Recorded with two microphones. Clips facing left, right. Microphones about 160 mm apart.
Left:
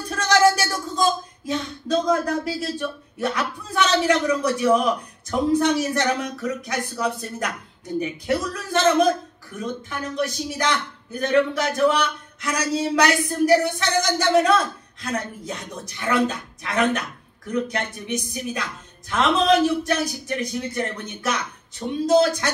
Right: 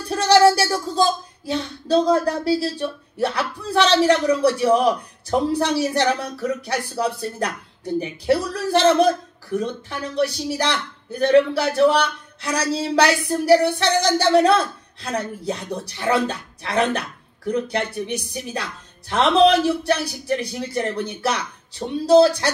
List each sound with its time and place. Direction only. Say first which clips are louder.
0.1 s speech: right 4 dB; 35° right (ahead or behind)